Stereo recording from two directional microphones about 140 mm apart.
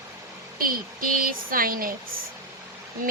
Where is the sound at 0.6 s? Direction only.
90° right.